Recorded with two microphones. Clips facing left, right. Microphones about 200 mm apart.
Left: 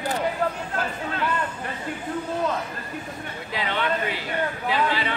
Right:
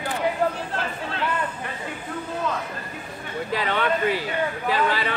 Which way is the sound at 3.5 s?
45° right (ahead or behind).